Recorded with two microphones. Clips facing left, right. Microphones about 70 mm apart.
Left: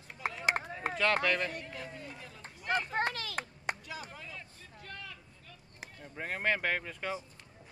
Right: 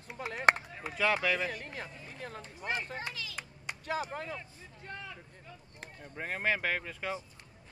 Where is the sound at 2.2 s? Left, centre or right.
Right.